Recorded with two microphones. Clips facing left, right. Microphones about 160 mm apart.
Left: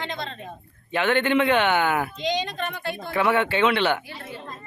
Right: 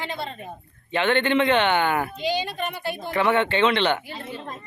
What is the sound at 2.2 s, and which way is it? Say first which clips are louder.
Speech: even; 5° right (ahead or behind).